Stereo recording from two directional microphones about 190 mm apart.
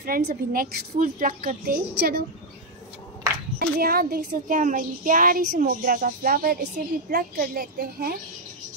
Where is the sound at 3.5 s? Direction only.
55° right (ahead or behind).